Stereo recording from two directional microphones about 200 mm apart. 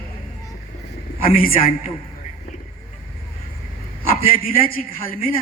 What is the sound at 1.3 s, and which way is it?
Speech, 45° left (ahead or behind).